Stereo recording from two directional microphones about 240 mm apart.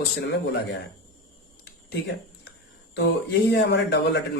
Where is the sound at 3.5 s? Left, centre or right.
Left.